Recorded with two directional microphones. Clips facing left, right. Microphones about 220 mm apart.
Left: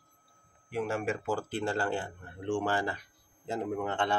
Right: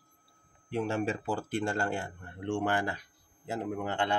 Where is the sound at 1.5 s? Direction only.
15° right (ahead or behind).